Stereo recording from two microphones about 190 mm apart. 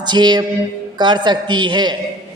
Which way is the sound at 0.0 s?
25° right (ahead or behind).